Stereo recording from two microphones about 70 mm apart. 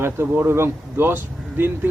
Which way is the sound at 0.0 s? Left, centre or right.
Right.